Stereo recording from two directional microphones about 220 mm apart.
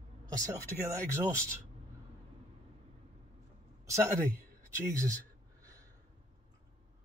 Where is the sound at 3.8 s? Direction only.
15° right (ahead or behind).